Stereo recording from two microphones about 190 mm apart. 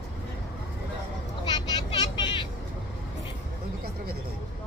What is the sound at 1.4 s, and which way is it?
Vehicle, 20° left (ahead or behind).